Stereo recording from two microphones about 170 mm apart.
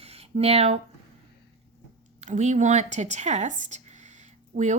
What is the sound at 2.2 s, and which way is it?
A woman's voice, 40° right (ahead or behind).